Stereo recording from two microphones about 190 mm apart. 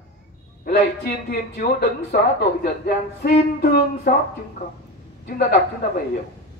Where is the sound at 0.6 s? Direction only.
55° left (ahead or behind).